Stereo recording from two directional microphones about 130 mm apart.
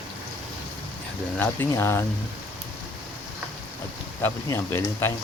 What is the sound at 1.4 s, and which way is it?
Speech, 20° left (ahead or behind).